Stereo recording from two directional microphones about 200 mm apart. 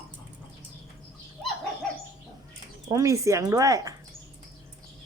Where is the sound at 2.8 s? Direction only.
15° right (ahead or behind).